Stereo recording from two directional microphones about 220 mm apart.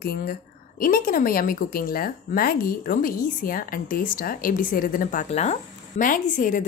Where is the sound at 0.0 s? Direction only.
45° left (ahead or behind).